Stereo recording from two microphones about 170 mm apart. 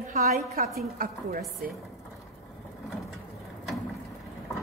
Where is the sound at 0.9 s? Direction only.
55° right (ahead or behind).